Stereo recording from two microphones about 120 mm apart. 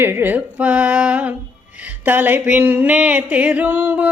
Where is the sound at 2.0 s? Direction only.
15° right (ahead or behind).